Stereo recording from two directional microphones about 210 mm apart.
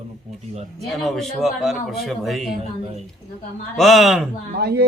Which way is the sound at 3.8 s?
Centre (ahead or behind).